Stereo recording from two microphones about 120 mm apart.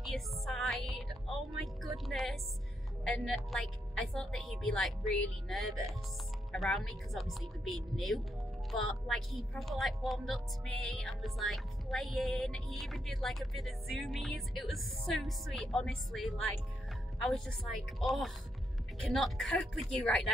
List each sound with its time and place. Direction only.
0.0 s music: centre (ahead or behind)
1.6 s a woman's voice: centre (ahead or behind)